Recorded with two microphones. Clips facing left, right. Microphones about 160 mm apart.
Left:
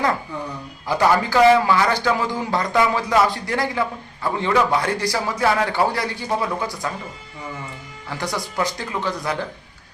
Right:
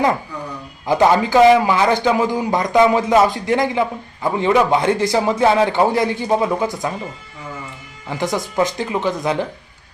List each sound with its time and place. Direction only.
0.9 s a man's voice: 20° right (ahead or behind)
8.1 s a man's voice: 20° right (ahead or behind)